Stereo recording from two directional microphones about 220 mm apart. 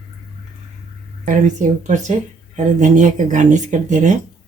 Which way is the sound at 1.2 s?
35° right (ahead or behind).